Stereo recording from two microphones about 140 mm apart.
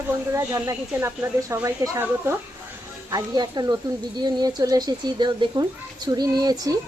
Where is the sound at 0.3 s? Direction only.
20° right (ahead or behind).